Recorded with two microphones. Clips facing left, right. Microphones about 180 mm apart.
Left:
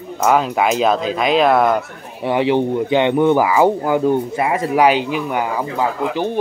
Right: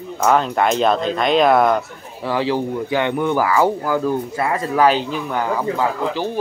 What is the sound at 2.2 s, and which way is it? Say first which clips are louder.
Speech: left 4 dB; 25° left (ahead or behind).